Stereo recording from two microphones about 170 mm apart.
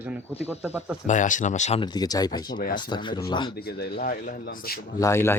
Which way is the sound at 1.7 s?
25° left (ahead or behind).